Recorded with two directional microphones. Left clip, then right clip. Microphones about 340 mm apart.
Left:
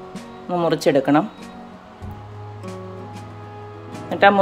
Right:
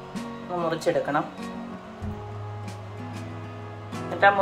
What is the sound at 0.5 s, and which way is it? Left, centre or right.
Speech, left.